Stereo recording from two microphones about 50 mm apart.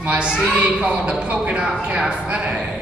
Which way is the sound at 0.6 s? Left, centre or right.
Right.